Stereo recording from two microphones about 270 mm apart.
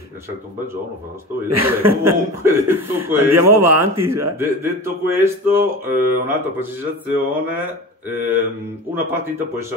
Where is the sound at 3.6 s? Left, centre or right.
Right.